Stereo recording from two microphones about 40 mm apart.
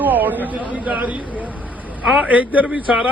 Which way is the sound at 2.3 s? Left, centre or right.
Right.